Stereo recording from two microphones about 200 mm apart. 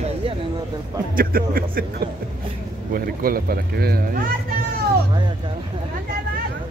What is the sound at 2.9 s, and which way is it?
Speech, 45° right (ahead or behind).